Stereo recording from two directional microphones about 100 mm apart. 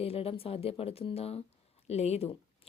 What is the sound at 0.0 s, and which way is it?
Speech, 75° left (ahead or behind).